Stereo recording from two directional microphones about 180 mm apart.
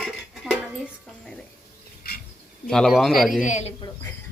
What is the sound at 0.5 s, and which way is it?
Dishes, centre (ahead or behind).